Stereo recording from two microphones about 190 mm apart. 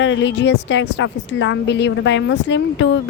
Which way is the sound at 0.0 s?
70° left (ahead or behind).